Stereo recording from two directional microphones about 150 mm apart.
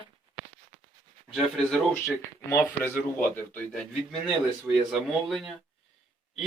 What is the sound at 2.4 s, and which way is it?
Speech, 20° left (ahead or behind).